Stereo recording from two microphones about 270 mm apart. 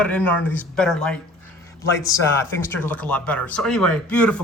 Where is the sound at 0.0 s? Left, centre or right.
Centre.